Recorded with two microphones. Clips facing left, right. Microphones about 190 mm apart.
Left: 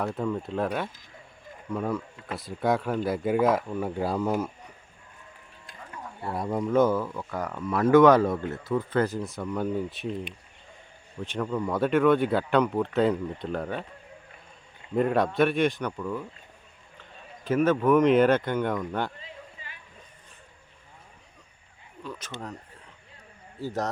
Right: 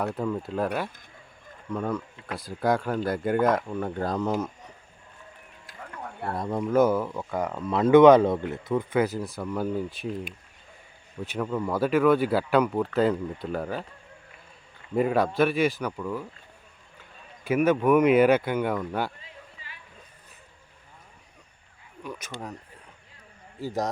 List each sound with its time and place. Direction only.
0.0 s speech: centre (ahead or behind)
6.0 s a sound: 60° right (ahead or behind)
6.3 s speech: 10° left (ahead or behind)
6.6 s speech: 5° right (ahead or behind)
14.9 s speech: centre (ahead or behind)
22.0 s speech: 15° right (ahead or behind)
23.6 s speech: 10° right (ahead or behind)